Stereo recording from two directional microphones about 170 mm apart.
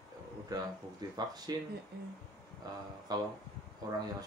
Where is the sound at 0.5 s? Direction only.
20° right (ahead or behind).